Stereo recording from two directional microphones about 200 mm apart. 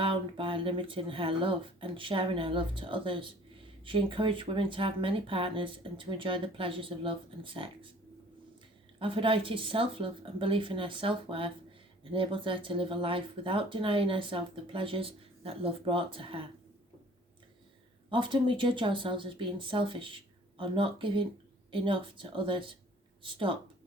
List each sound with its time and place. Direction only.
0.0 s speech: 25° right (ahead or behind)
9.0 s speech: 25° right (ahead or behind)
18.1 s speech: 25° right (ahead or behind)